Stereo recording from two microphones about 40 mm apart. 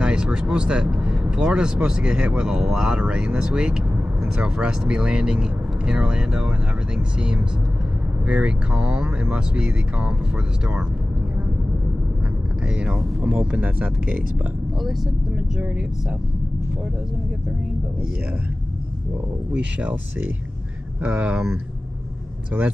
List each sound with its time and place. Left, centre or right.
0.0 s speech: right
12.6 s speech: right
15.3 s speech: right
19.5 s speech: right